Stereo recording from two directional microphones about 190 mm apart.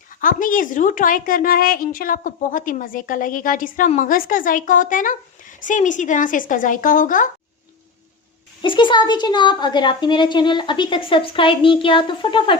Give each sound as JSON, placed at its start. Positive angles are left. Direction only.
{"t": 0.1, "sound": "a woman's voice", "side_deg": 45}
{"t": 8.6, "sound": "a woman's voice", "side_deg": 25}